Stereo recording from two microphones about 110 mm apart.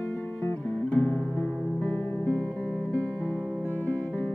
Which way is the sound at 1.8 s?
15° left (ahead or behind).